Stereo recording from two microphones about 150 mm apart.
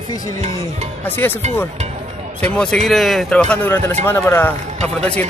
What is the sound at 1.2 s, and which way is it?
A man's voice, 10° left (ahead or behind).